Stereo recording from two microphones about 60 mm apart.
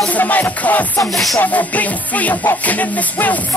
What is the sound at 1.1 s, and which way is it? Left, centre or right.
Music, centre.